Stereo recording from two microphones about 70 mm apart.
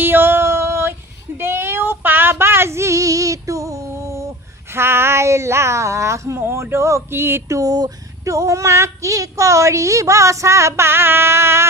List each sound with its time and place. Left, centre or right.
0.0 s music: right
1.4 s child singing: right
4.7 s speech: right